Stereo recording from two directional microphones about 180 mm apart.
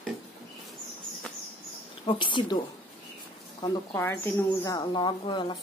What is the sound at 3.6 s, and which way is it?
Speech, 25° left (ahead or behind).